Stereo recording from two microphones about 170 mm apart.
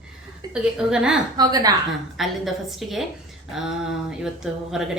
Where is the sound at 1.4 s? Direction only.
20° right (ahead or behind).